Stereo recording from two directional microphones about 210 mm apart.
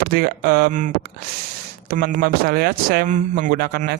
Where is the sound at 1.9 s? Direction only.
40° right (ahead or behind).